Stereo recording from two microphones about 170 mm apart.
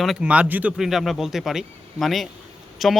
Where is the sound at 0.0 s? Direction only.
5° right (ahead or behind).